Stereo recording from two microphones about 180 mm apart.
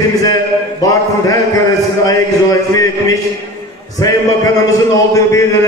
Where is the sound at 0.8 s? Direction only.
20° left (ahead or behind).